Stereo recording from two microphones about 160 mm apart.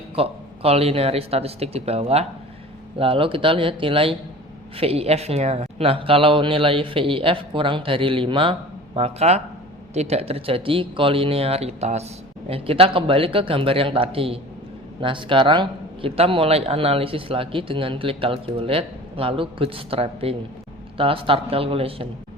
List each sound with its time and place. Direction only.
0.2 s a man's voice: 40° right (ahead or behind)